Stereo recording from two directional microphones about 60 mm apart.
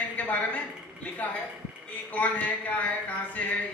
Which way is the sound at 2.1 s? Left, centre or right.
Left.